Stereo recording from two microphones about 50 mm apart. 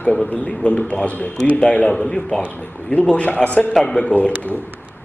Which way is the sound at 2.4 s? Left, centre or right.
Left.